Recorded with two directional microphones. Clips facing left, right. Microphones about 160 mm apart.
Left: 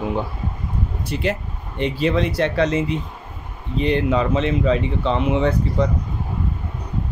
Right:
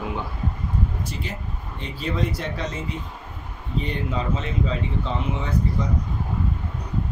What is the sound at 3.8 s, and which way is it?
Speech, 75° left (ahead or behind).